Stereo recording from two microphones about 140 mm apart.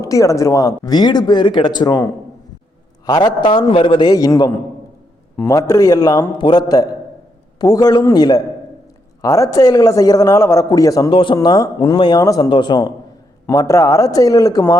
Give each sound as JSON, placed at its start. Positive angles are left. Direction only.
{"t": 0.0, "sound": "speech", "side_deg": 25}
{"t": 3.1, "sound": "a man's voice", "side_deg": 30}
{"t": 11.1, "sound": "a man's voice", "side_deg": 35}